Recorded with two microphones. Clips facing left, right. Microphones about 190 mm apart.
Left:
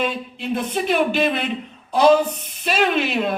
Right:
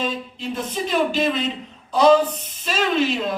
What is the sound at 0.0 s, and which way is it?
A woman's voice, 60° left (ahead or behind).